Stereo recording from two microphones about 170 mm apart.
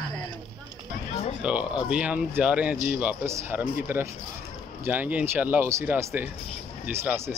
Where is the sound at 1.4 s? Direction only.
5° right (ahead or behind).